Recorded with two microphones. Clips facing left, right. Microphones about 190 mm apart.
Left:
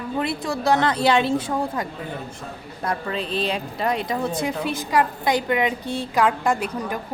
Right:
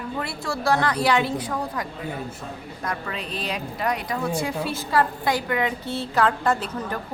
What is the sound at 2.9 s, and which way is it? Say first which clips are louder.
Speech: left 5 dB; 30° left (ahead or behind).